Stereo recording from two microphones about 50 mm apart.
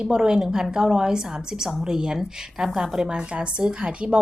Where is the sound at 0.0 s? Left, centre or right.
Centre.